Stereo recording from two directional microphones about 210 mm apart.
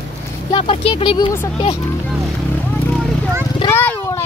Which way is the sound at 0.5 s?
25° left (ahead or behind).